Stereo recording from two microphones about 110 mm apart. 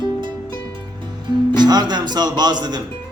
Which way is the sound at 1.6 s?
40° right (ahead or behind).